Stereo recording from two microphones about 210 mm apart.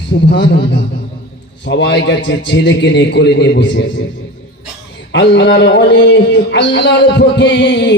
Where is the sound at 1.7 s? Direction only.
55° left (ahead or behind).